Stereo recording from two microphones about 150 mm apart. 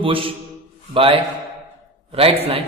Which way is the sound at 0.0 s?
35° right (ahead or behind).